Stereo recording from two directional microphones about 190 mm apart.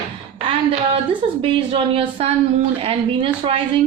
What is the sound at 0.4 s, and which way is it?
Speech, 30° right (ahead or behind).